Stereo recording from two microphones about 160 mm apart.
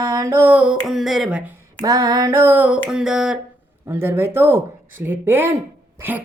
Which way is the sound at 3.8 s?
15° right (ahead or behind).